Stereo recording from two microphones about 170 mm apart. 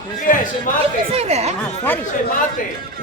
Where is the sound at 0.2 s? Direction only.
50° left (ahead or behind).